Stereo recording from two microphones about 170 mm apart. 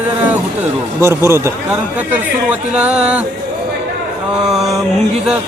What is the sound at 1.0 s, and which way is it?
A man's voice, 15° right (ahead or behind).